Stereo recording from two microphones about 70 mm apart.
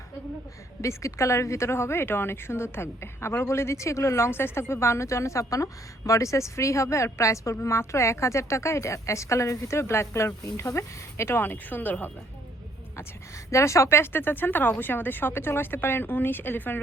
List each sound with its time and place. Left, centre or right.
0.8 s a woman's voice: left
11.4 s a woman's voice: left
13.0 s a woman's voice: left